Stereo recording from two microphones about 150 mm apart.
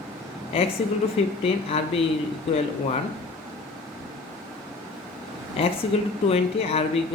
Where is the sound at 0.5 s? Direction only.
40° left (ahead or behind).